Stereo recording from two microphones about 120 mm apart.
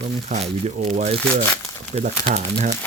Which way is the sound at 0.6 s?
65° right (ahead or behind).